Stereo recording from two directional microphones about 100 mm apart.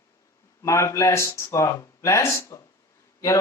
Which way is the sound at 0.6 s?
30° left (ahead or behind).